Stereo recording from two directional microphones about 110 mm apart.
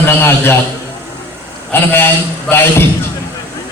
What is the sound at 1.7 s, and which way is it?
A man's voice, 20° left (ahead or behind).